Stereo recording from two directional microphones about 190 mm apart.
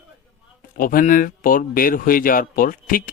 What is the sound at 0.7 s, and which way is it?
Speech, 50° left (ahead or behind).